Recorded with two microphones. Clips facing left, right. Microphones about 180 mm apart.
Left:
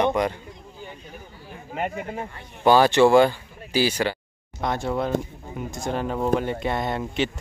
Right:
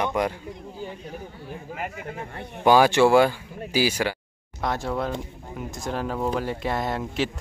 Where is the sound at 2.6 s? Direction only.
10° right (ahead or behind).